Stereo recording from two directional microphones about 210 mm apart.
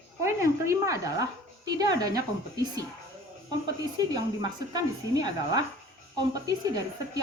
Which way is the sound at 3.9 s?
20° right (ahead or behind).